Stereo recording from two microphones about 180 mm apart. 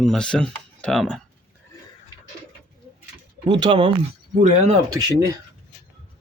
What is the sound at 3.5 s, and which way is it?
Speech, 30° right (ahead or behind).